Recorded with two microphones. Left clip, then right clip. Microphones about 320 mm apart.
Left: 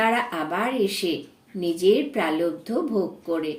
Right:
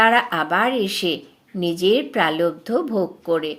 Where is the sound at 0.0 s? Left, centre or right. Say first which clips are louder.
Right 6 dB; right.